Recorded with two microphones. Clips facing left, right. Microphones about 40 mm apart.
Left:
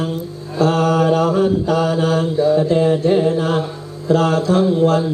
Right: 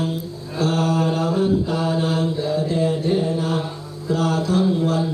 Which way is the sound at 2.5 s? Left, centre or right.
Left.